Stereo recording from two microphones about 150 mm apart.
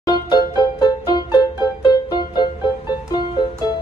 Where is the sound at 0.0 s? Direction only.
30° left (ahead or behind).